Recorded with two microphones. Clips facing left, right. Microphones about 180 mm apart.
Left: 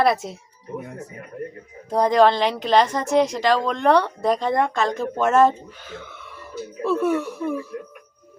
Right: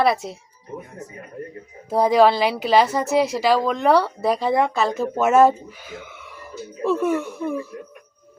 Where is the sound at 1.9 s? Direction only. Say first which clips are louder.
Right 1 dB; 5° right (ahead or behind).